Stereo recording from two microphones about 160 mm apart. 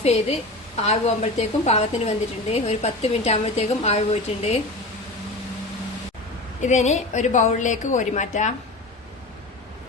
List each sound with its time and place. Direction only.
0.0 s a woman's voice: 40° left (ahead or behind)
6.6 s a woman's voice: 45° left (ahead or behind)